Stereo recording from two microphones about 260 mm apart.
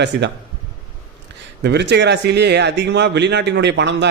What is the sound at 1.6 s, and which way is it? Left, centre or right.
A man's voice, right.